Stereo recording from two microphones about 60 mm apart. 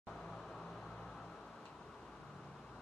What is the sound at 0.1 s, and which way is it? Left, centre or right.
Vehicle, centre.